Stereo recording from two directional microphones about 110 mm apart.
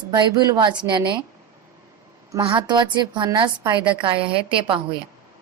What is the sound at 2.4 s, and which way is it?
A woman's voice, 45° right (ahead or behind).